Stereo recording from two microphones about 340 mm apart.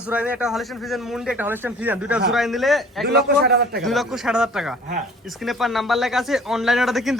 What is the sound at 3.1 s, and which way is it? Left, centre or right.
Speech, right.